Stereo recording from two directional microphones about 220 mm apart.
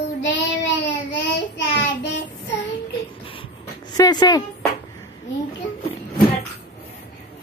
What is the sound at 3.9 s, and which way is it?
Speech, 20° left (ahead or behind).